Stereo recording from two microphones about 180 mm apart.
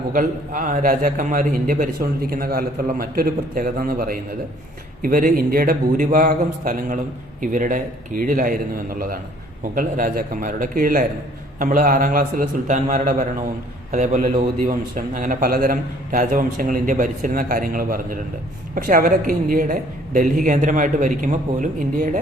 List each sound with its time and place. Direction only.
0.1 s a man's voice: 50° right (ahead or behind)